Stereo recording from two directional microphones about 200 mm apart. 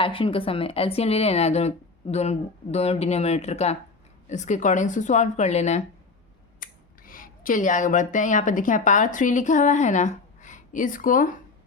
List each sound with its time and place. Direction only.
0.0 s speech: 25° left (ahead or behind); by 11.3 s 40° left (ahead or behind)